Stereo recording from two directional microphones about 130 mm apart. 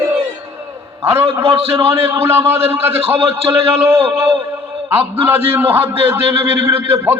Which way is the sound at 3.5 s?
15° right (ahead or behind).